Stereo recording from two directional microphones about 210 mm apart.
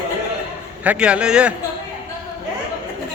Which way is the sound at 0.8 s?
5° right (ahead or behind).